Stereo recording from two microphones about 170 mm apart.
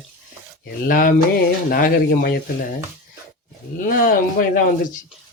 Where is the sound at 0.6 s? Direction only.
55° left (ahead or behind).